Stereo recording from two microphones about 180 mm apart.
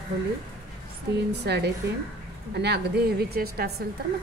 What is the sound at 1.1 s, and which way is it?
A woman's voice, 65° right (ahead or behind).